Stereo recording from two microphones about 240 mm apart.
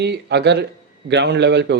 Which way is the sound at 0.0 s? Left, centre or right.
Right.